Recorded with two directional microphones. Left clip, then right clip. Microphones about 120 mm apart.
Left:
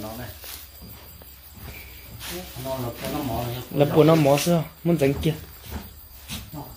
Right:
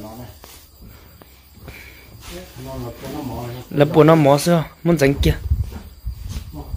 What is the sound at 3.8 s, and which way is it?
Speech, 45° right (ahead or behind).